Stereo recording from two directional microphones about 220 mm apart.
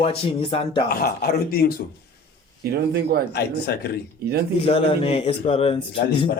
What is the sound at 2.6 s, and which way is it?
Speech, 45° right (ahead or behind).